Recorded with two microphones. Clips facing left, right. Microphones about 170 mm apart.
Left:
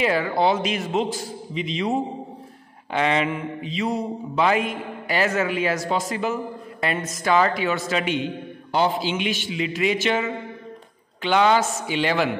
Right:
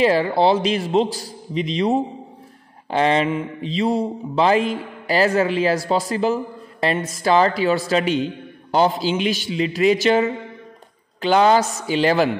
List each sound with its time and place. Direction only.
0.0 s mantra: 30° right (ahead or behind)